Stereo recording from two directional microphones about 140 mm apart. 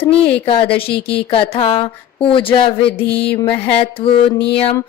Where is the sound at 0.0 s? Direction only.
40° left (ahead or behind).